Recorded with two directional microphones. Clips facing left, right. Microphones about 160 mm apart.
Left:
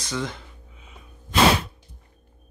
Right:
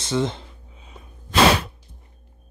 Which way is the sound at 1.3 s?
90° right.